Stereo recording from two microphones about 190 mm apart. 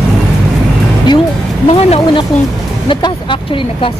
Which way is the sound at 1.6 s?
35° left (ahead or behind).